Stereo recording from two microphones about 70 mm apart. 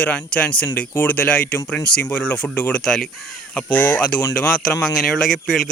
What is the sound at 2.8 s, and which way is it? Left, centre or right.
Speech, centre.